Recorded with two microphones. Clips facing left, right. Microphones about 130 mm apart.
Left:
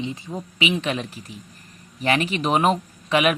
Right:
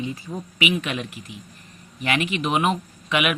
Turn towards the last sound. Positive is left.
turn(degrees=35)  # may be behind; listen again after turning